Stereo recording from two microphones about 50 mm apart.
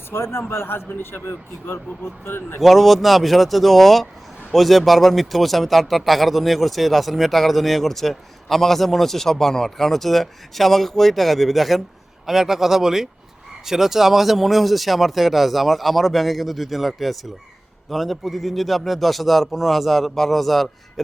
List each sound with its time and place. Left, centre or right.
0.1 s a man's voice: left
2.6 s speech: centre